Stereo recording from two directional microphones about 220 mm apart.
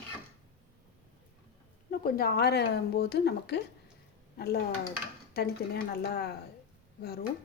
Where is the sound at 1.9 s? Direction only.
45° left (ahead or behind).